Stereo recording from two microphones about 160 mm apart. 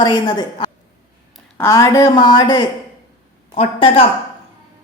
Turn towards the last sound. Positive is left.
turn(degrees=35)  # may be behind; listen again after turning